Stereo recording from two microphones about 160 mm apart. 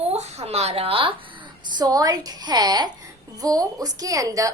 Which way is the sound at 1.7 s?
25° right (ahead or behind).